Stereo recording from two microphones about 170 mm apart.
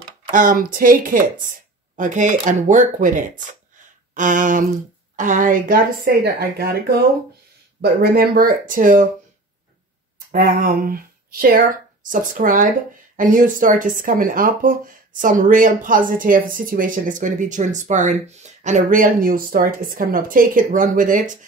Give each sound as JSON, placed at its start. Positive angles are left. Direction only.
{"t": 0.3, "sound": "a woman's voice", "side_deg": -55}
{"t": 10.3, "sound": "speech", "side_deg": -60}